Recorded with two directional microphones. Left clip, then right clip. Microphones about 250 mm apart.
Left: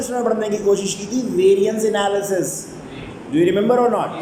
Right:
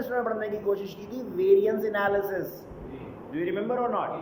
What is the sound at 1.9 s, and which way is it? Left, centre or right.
A woman's voice, centre.